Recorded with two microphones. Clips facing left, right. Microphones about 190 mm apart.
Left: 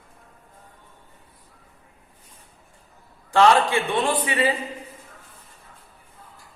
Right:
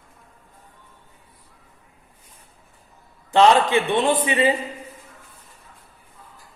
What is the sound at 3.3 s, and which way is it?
A man's voice, 20° right (ahead or behind).